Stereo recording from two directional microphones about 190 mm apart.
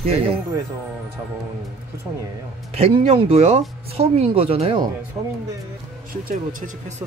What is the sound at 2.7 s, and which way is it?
Speech, 30° right (ahead or behind).